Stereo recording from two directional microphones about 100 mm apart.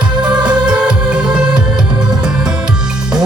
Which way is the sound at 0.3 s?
45° right (ahead or behind).